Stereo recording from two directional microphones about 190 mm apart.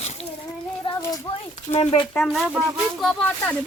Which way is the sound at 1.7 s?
35° left (ahead or behind).